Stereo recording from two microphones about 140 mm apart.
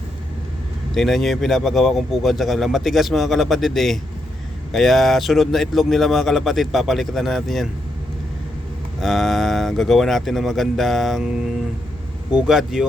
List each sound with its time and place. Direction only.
0.9 s speech: centre (ahead or behind)
9.0 s speech: centre (ahead or behind)
12.3 s speech: 5° right (ahead or behind)